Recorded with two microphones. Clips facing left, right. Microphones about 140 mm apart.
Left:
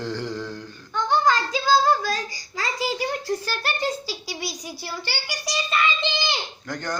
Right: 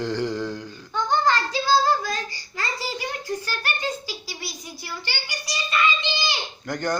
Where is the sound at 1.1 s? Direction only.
15° left (ahead or behind).